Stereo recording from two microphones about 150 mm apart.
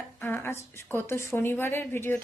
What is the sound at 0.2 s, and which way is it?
A woman's voice, 15° left (ahead or behind).